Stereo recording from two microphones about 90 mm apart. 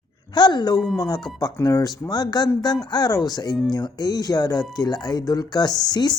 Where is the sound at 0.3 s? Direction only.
55° left (ahead or behind).